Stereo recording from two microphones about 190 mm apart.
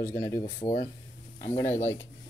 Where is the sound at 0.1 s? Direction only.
15° left (ahead or behind).